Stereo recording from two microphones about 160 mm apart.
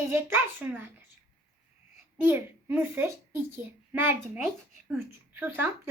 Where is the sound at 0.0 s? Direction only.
15° right (ahead or behind).